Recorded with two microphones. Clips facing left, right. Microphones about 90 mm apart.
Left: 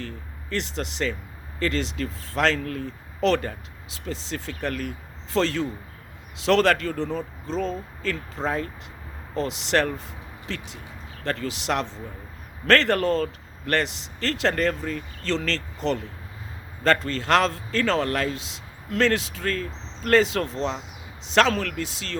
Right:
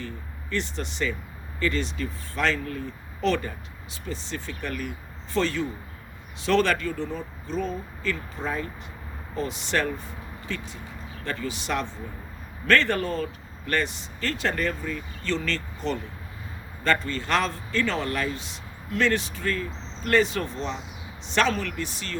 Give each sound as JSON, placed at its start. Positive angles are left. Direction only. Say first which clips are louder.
{"t": 0.6, "sound": "speech", "louder": "left 4 dB", "side_deg": 90}
{"t": 8.4, "sound": "speech", "louder": "left 3 dB", "side_deg": 75}
{"t": 9.3, "sound": "a man's voice", "louder": "left 4 dB", "side_deg": 90}